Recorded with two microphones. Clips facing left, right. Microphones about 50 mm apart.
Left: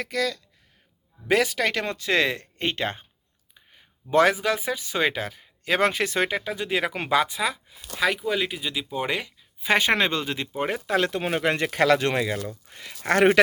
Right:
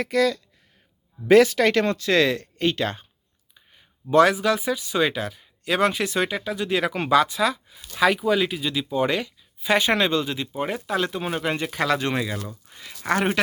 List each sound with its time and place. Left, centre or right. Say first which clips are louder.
0.0 s speech: right 6 dB; centre
2.0 s speech: right 3 dB; left
4.1 s speech: right 2 dB; left; by 7.8 s centre
7.9 s speech: right 4 dB; centre
9.6 s speech: right 1 dB; left
10.8 s speech: left 1 dB; left